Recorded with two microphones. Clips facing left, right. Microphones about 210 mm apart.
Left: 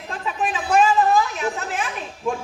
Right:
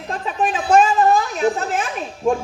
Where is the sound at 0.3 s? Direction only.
40° right (ahead or behind).